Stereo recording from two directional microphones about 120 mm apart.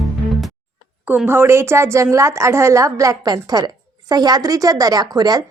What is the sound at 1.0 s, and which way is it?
A woman's voice, 15° right (ahead or behind).